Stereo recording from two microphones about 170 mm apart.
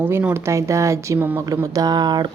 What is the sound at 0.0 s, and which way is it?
A woman's voice, 10° right (ahead or behind).